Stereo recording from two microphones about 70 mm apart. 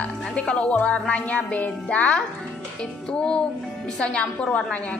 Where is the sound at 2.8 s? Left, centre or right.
Centre.